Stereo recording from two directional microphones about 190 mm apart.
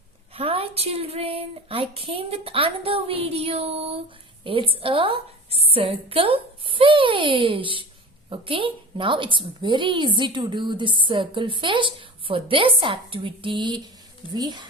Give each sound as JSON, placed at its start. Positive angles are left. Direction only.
{"t": 0.3, "sound": "a woman's voice", "side_deg": -30}